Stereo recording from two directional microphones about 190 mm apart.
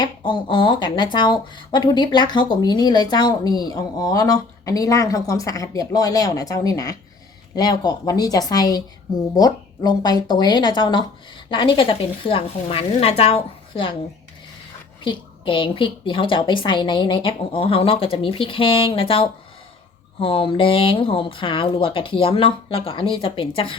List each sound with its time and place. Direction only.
0.0 s speech: 25° left (ahead or behind)
15.0 s speech: 25° left (ahead or behind)